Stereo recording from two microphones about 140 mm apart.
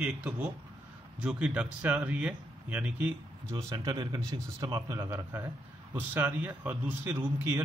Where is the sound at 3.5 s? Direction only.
30° right (ahead or behind).